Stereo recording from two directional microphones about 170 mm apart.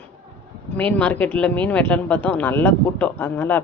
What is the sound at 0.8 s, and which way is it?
Speech, 10° left (ahead or behind).